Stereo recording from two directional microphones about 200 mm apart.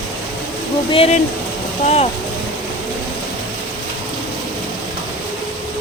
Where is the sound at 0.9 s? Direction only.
30° left (ahead or behind).